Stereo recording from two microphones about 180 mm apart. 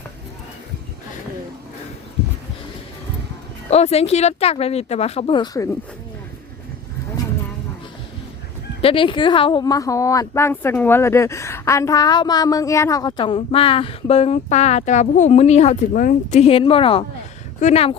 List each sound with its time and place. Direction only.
3.7 s speech: 35° left (ahead or behind)
8.8 s speech: 30° left (ahead or behind)